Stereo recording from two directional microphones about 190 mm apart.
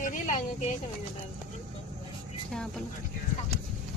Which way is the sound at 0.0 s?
40° left (ahead or behind).